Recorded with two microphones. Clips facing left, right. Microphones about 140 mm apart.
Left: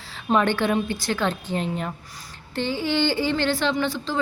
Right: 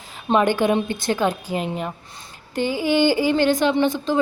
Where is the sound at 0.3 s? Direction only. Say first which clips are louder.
Right 3 dB; 15° right (ahead or behind).